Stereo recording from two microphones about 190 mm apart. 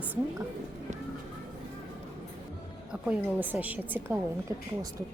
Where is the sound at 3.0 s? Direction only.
5° right (ahead or behind).